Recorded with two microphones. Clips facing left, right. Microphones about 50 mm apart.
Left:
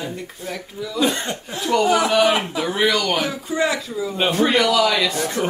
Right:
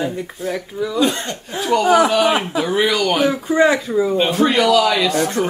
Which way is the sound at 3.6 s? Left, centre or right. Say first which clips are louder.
Right 7 dB; right.